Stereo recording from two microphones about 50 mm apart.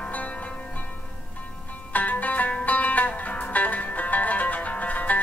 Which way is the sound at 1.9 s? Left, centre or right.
Left.